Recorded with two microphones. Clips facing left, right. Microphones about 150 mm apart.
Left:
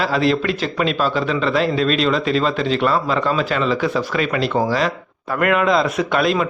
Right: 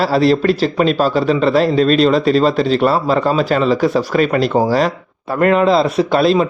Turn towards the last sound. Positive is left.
turn(degrees=-30)  # may be behind; listen again after turning